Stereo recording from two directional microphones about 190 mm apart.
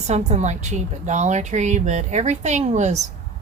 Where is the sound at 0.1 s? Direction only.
35° right (ahead or behind).